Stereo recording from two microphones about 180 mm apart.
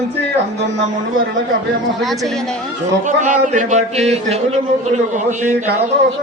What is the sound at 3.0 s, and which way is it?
Speech, 45° right (ahead or behind).